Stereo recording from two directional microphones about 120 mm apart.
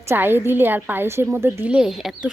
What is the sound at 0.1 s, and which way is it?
Speech, 20° right (ahead or behind).